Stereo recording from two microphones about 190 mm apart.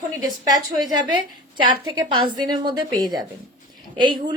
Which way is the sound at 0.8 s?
20° right (ahead or behind).